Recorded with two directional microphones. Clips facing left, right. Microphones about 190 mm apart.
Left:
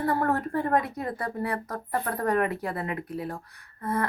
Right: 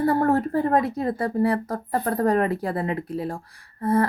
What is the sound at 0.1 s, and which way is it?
Speech, 30° right (ahead or behind).